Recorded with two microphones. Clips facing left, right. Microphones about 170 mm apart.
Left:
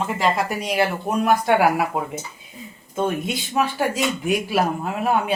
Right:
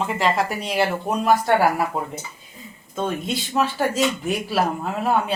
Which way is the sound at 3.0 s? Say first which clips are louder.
Left 2 dB; 10° left (ahead or behind).